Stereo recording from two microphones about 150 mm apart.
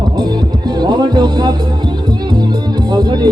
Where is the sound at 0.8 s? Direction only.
30° right (ahead or behind).